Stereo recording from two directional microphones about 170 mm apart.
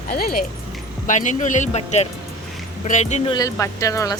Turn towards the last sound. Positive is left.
turn(degrees=20)  # may be behind; listen again after turning